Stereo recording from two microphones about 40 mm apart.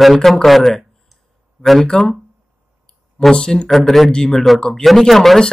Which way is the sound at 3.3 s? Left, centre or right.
Centre.